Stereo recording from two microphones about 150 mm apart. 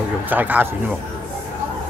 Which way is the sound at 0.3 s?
10° right (ahead or behind).